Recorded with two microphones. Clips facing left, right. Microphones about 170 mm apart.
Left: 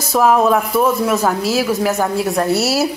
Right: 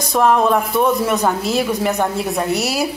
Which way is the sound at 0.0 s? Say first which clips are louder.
Left 1 dB; 5° left (ahead or behind).